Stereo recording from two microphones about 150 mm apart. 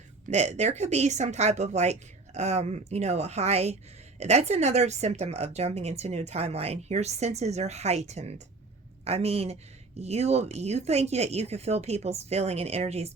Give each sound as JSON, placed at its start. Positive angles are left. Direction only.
{"t": 0.3, "sound": "a woman's voice", "side_deg": -50}